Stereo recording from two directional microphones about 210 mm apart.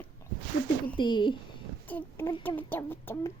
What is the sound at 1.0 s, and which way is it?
Speech, 20° left (ahead or behind).